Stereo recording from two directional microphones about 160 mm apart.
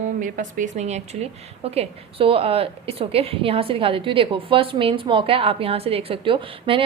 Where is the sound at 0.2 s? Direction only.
60° right (ahead or behind).